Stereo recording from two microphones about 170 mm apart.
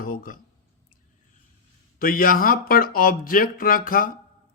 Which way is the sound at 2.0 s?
55° left (ahead or behind).